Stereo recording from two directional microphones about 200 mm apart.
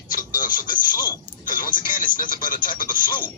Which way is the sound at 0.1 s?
45° left (ahead or behind).